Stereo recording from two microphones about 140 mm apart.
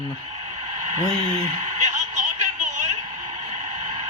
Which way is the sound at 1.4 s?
55° right (ahead or behind).